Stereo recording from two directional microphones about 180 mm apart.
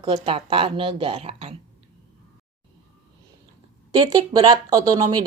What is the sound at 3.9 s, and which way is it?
Speech, 20° right (ahead or behind).